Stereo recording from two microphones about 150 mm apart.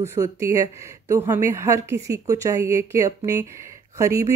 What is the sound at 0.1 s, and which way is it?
Speech, 20° right (ahead or behind).